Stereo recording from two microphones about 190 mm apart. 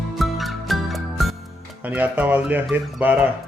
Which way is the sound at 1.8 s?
10° right (ahead or behind).